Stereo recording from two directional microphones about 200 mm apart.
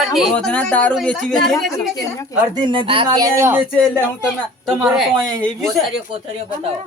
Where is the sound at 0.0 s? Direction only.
Centre (ahead or behind).